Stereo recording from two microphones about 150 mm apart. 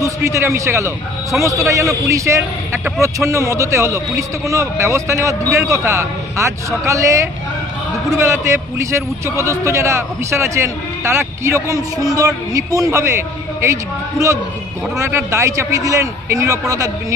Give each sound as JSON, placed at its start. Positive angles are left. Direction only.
{"t": 0.0, "sound": "a man's voice", "side_deg": -20}
{"t": 15.0, "sound": "a man's voice", "side_deg": -20}